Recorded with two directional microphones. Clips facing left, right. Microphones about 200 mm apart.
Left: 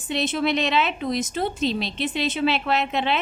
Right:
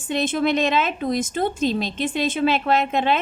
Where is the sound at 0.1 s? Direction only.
50° right (ahead or behind).